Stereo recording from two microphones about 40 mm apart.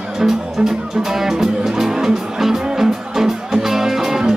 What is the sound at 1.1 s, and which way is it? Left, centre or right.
Music, centre.